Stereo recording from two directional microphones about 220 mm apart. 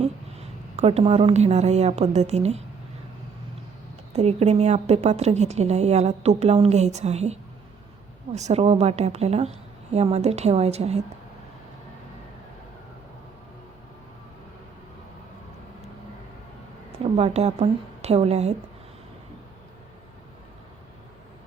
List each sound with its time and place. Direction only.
0.0 s a woman's voice: 30° right (ahead or behind)
4.1 s a woman's voice: 30° right (ahead or behind)
17.0 s a woman's voice: 30° right (ahead or behind)